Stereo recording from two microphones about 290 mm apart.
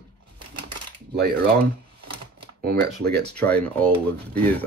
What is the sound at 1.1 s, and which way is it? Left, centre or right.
Speech, right.